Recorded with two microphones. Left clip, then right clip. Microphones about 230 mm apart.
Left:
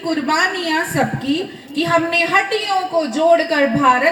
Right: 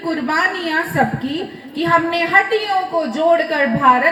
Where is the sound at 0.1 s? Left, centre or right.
Left.